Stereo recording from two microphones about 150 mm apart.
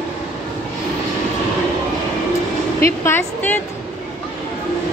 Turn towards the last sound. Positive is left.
turn(degrees=15)  # may be behind; listen again after turning